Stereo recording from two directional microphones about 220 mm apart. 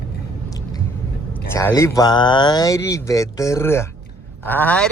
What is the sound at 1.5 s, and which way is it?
A man's voice, 15° left (ahead or behind).